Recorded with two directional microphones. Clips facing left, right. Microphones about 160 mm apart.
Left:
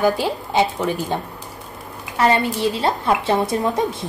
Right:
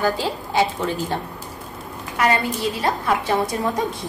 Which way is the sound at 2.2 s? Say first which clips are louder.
Left 3 dB; 25° left (ahead or behind).